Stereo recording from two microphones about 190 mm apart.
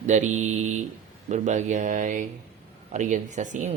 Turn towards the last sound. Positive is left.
turn(degrees=-40)  # may be behind; listen again after turning